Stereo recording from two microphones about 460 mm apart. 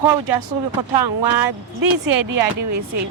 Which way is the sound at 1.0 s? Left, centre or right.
Right.